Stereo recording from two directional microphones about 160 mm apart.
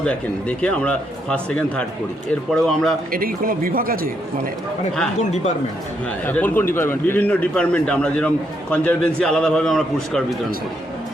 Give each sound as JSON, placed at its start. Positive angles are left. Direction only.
{"t": 0.0, "sound": "a man's voice", "side_deg": 10}
{"t": 3.1, "sound": "speech", "side_deg": -65}
{"t": 6.2, "sound": "a man's voice", "side_deg": 10}